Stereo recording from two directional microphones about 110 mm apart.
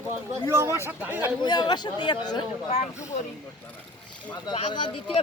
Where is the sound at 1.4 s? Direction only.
40° left (ahead or behind).